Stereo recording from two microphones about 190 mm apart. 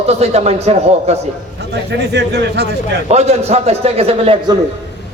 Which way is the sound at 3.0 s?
35° right (ahead or behind).